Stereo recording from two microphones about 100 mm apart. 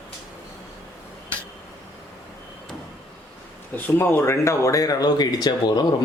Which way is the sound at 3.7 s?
20° left (ahead or behind).